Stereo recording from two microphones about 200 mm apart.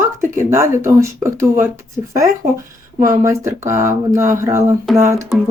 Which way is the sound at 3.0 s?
15° right (ahead or behind).